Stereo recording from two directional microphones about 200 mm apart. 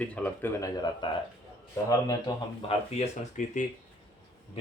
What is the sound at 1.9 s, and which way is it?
Speech, 20° left (ahead or behind).